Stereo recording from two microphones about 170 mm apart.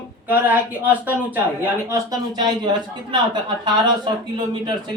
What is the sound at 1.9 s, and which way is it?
A woman's voice, 25° right (ahead or behind).